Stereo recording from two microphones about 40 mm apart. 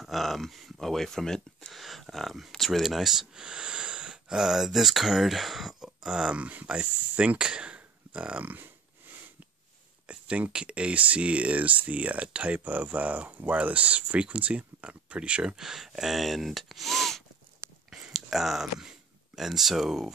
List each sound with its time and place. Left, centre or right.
0.0 s speech: centre
1.7 s speech: centre
6.3 s speech: right
8.4 s speech: right
10.0 s speech: right
12.5 s speech: right
15.5 s speech: centre
18.1 s speech: centre